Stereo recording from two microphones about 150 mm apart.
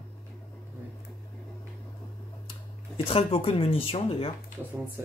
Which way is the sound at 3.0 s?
40° left (ahead or behind).